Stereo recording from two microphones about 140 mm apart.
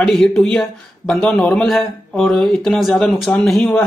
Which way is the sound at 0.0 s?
5° left (ahead or behind).